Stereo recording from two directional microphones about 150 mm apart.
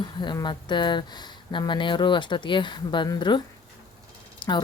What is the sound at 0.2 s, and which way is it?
Speech, 30° left (ahead or behind).